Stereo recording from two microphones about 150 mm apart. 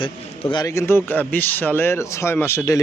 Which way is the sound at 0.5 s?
25° left (ahead or behind).